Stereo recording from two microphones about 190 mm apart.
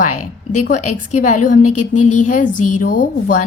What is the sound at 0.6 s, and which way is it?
A woman's voice, 40° left (ahead or behind).